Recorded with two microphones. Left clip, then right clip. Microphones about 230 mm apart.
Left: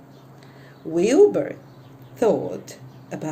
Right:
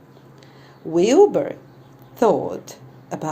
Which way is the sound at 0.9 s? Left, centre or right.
Centre.